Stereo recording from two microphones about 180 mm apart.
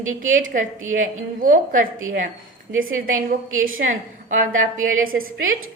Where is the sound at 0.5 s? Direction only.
50° right (ahead or behind).